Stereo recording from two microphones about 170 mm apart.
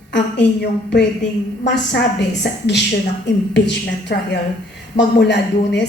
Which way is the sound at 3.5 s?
90° left.